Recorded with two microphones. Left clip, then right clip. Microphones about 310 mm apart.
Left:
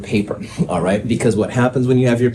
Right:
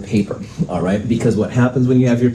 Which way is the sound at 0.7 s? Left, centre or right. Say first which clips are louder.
Left 1 dB; left.